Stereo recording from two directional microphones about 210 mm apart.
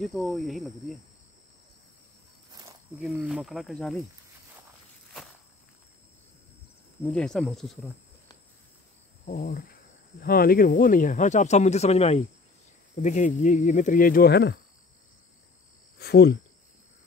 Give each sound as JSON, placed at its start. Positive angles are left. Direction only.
{"t": 0.0, "sound": "speech", "side_deg": 0}
{"t": 3.0, "sound": "speech", "side_deg": 0}
{"t": 7.0, "sound": "speech", "side_deg": 5}
{"t": 9.2, "sound": "cricket", "side_deg": 40}
{"t": 10.2, "sound": "speech", "side_deg": 45}
{"t": 16.0, "sound": "speech", "side_deg": 50}